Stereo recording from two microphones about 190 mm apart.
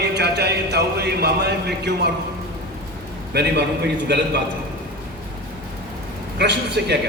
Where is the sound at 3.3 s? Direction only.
60° right (ahead or behind).